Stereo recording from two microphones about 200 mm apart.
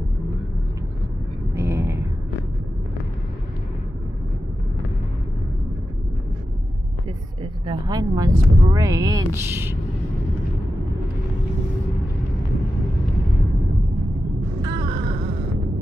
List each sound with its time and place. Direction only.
1.5 s a sound: 10° right (ahead or behind)
7.6 s speech: 20° right (ahead or behind)
14.6 s music: 25° right (ahead or behind)